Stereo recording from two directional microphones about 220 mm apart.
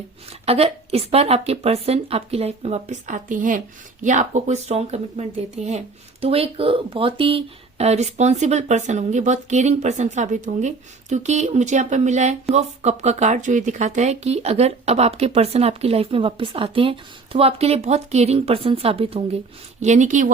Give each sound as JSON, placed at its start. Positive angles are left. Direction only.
{"t": 0.4, "sound": "speech", "side_deg": -25}